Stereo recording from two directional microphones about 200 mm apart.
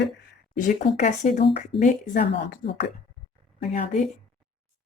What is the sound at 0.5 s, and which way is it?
Speech, 40° left (ahead or behind).